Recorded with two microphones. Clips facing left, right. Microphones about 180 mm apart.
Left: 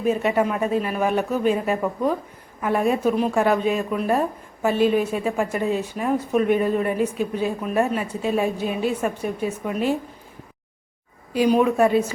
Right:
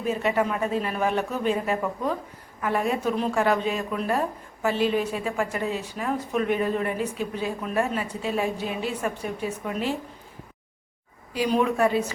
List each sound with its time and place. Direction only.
0.1 s a woman's voice: 20° left (ahead or behind)
11.3 s speech: 15° left (ahead or behind)